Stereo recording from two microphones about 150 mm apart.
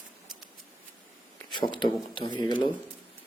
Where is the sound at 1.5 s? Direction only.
30° left (ahead or behind).